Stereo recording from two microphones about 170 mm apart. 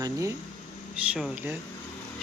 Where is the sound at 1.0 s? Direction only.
5° right (ahead or behind).